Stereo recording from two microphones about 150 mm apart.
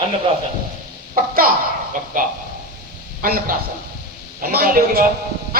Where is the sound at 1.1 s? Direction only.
70° right (ahead or behind).